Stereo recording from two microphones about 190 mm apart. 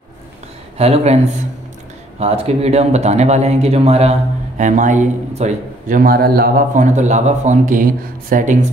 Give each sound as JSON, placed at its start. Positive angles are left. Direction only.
{"t": 0.7, "sound": "speech", "side_deg": -35}